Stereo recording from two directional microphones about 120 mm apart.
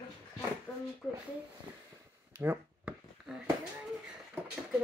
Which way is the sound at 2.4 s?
15° right (ahead or behind).